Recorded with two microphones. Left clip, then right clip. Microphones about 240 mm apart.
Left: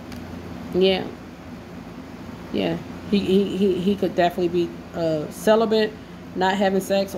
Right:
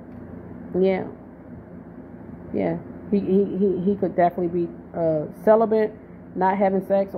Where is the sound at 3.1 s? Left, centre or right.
Right.